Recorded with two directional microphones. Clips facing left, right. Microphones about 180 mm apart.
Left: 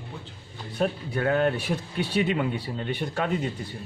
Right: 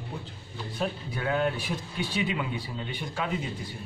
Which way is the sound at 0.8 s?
50° left (ahead or behind).